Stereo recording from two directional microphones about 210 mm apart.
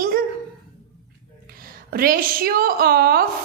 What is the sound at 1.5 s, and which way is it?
A woman's voice, 45° right (ahead or behind).